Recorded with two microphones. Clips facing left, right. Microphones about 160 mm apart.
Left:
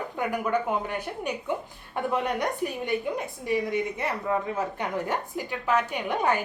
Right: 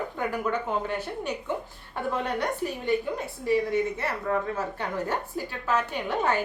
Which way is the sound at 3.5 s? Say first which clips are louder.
Right 3 dB; 15° left (ahead or behind).